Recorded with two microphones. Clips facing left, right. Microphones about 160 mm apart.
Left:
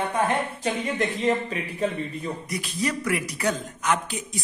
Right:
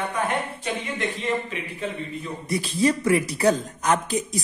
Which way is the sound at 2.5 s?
30° right (ahead or behind).